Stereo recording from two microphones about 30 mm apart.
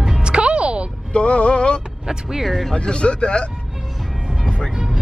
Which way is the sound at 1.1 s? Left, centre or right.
Left.